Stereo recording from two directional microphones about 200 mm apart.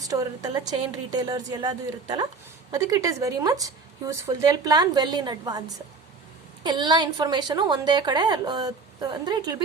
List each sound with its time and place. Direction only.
0.0 s a woman's voice: 20° right (ahead or behind)